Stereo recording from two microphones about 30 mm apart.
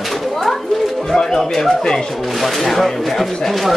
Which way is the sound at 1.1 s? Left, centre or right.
Centre.